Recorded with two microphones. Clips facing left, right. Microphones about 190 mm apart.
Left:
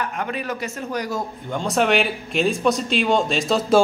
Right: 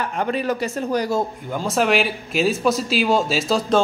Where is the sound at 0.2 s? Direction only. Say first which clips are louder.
Right 5 dB; 35° right (ahead or behind).